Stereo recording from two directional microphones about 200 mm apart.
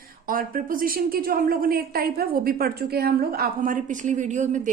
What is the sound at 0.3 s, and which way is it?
Speech, 45° right (ahead or behind).